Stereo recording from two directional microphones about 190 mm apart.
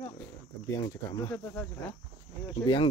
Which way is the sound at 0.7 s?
20° left (ahead or behind).